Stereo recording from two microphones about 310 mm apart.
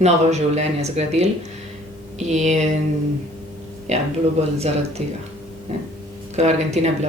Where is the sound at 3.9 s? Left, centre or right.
Right.